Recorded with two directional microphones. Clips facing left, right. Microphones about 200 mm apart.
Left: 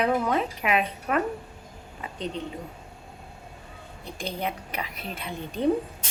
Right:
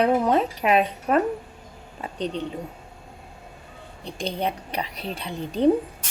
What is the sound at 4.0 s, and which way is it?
A woman's voice, 30° right (ahead or behind).